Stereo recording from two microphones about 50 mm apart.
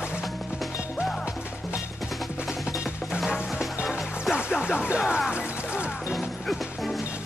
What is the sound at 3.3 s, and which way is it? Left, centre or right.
Music, centre.